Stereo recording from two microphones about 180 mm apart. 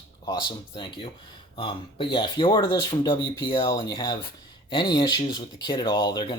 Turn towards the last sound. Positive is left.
turn(degrees=25)  # may be behind; listen again after turning